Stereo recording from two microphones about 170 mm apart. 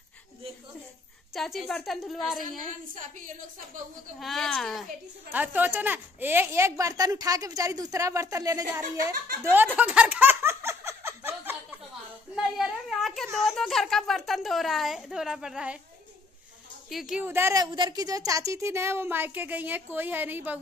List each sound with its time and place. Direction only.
1.3 s a woman's voice: centre (ahead or behind)
2.9 s a woman's voice: 50° right (ahead or behind)
4.2 s speech: centre (ahead or behind)
5.3 s speech: 10° right (ahead or behind)
9.4 s a sound: 10° right (ahead or behind)
12.4 s a sound: centre (ahead or behind)
13.4 s speech: centre (ahead or behind)
16.9 s speech: 5° right (ahead or behind)
17.6 s speech: 25° right (ahead or behind); by 20.5 s 10° right (ahead or behind)